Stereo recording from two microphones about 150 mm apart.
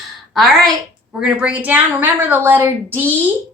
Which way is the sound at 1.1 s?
5° right (ahead or behind).